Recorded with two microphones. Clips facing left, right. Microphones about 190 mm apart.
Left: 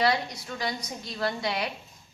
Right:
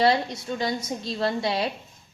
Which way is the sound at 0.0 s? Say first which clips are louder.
Right 4 dB; 25° right (ahead or behind).